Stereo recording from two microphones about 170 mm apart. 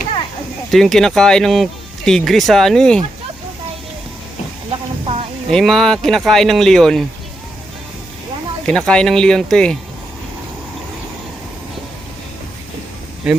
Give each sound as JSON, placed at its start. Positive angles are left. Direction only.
{"t": 0.7, "sound": "speech", "side_deg": 0}
{"t": 4.7, "sound": "a sound", "side_deg": -35}
{"t": 5.5, "sound": "speech", "side_deg": 0}
{"t": 8.6, "sound": "speech", "side_deg": 5}
{"t": 13.2, "sound": "speech", "side_deg": -5}